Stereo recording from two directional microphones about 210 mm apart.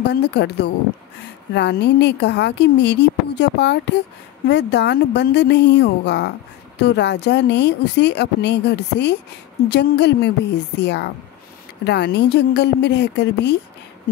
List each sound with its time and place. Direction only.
0.0 s a woman's voice: 55° left (ahead or behind)